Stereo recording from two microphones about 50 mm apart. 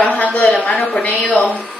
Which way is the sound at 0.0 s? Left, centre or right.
Left.